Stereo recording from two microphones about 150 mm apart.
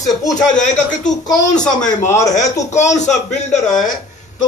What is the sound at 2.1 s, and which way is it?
Speech, 20° left (ahead or behind).